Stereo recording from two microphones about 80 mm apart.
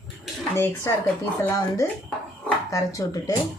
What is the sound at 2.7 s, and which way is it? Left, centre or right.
Speech, left.